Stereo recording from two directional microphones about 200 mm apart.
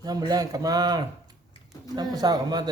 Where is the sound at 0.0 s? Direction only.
20° right (ahead or behind).